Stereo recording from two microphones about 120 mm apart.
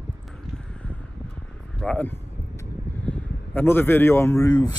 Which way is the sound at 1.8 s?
5° left (ahead or behind).